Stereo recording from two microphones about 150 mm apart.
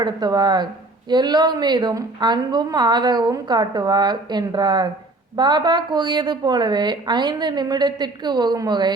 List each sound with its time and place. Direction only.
0.0 s a woman's voice: 25° right (ahead or behind)